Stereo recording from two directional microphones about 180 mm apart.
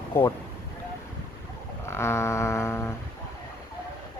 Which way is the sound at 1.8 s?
15° left (ahead or behind).